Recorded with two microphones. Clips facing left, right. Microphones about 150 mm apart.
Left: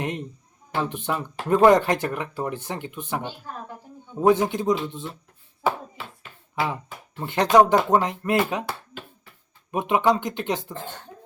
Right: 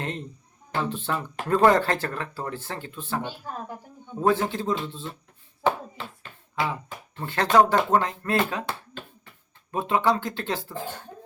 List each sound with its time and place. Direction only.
0.0 s speech: 15° left (ahead or behind)
7.2 s speech: 15° left (ahead or behind)